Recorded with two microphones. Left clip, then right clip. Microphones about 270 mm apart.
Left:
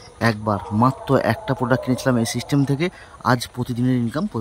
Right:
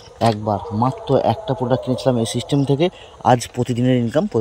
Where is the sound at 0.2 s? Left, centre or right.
Left.